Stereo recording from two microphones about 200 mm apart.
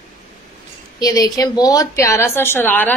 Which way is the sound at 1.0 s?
20° left (ahead or behind).